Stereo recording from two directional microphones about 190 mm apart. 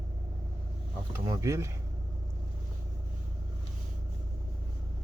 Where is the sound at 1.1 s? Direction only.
15° right (ahead or behind).